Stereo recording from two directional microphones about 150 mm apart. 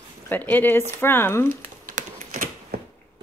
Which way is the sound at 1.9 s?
65° right (ahead or behind).